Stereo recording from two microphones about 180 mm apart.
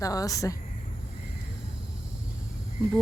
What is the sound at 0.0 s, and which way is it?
Speech, 20° left (ahead or behind).